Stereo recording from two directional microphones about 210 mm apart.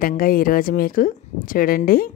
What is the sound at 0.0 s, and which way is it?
A woman's voice, 45° left (ahead or behind).